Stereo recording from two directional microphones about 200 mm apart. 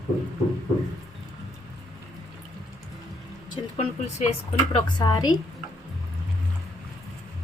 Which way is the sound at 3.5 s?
30° left (ahead or behind).